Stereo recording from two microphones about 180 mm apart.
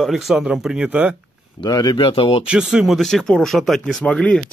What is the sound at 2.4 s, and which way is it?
A man's voice, 5° right (ahead or behind).